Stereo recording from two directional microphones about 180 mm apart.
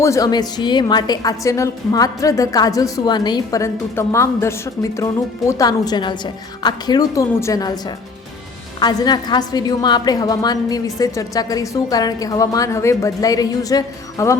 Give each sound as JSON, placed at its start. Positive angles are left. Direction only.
{"t": 0.0, "sound": "a woman's voice", "side_deg": 15}